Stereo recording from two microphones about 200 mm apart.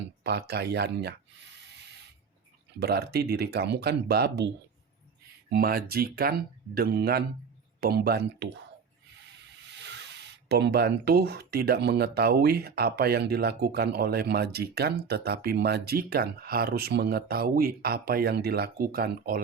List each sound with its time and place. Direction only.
0.2 s speech: 55° right (ahead or behind)
2.8 s speech: 55° right (ahead or behind)
9.7 s speech: 60° right (ahead or behind)